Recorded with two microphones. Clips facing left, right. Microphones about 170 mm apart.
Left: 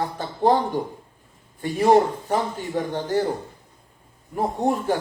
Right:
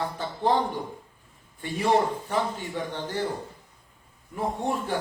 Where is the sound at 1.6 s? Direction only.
40° left (ahead or behind).